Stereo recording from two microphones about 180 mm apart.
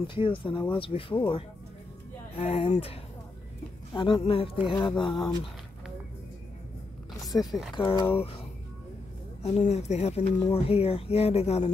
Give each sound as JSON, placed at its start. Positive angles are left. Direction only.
{"t": 0.0, "sound": "speech", "side_deg": 30}
{"t": 7.3, "sound": "speech", "side_deg": 15}
{"t": 7.7, "sound": "speech", "side_deg": 25}
{"t": 9.4, "sound": "speech", "side_deg": 35}